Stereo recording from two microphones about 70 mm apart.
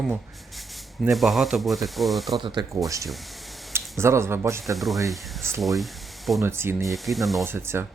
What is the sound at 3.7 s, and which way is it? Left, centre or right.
Speech, right.